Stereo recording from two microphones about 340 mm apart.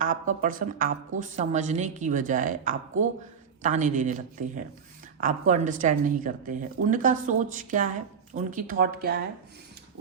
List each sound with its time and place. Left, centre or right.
0.0 s a woman's voice: right